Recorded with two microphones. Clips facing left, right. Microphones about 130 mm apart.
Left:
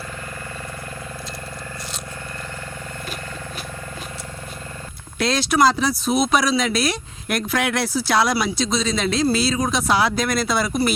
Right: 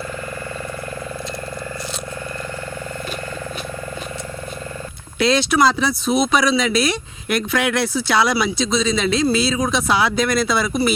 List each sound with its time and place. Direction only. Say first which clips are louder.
5.2 s speech: right 2 dB; centre (ahead or behind)